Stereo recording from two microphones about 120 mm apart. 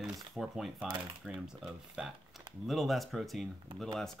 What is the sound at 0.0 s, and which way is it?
Speech, centre (ahead or behind).